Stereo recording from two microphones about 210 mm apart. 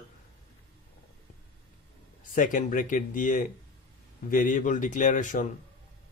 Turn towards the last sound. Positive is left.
turn(degrees=35)  # may be behind; listen again after turning